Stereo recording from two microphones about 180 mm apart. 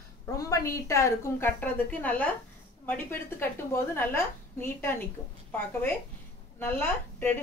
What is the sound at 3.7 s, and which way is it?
A woman's voice, 10° left (ahead or behind).